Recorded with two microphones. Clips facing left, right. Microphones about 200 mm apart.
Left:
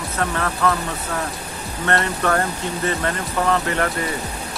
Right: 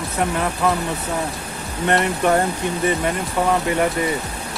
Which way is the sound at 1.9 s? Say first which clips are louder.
Right 3 dB; 15° right (ahead or behind).